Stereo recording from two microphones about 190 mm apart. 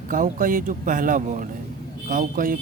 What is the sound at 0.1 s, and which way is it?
Speech, 45° right (ahead or behind).